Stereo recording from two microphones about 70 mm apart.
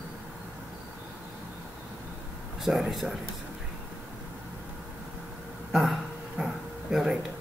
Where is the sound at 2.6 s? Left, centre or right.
Centre.